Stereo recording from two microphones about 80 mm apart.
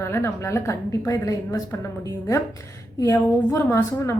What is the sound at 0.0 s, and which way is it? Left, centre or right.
A woman's voice, left.